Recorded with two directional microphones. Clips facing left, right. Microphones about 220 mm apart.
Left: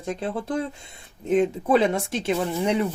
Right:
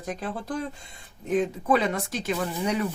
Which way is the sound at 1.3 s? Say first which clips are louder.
Left 4 dB; 25° left (ahead or behind).